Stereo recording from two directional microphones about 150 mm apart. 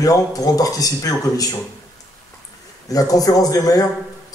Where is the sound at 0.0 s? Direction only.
25° left (ahead or behind).